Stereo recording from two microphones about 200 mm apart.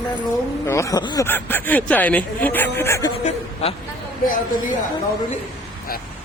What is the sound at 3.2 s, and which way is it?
Speech, 35° left (ahead or behind).